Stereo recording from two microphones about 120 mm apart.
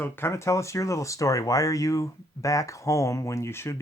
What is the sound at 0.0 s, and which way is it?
Speech, 20° left (ahead or behind).